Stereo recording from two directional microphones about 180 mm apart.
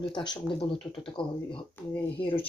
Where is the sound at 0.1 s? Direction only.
25° left (ahead or behind).